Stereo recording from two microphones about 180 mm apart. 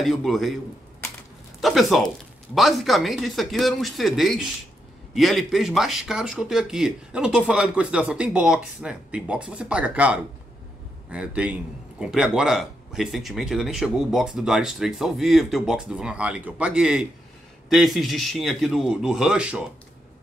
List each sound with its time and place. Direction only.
0.0 s a man's voice: centre (ahead or behind)
1.6 s a man's voice: centre (ahead or behind)